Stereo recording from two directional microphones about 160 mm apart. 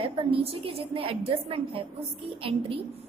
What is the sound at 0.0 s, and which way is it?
A woman's voice, 35° right (ahead or behind).